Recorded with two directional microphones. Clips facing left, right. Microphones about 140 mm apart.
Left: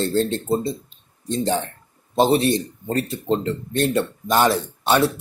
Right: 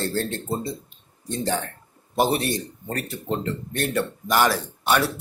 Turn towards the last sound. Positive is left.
turn(degrees=25)  # may be behind; listen again after turning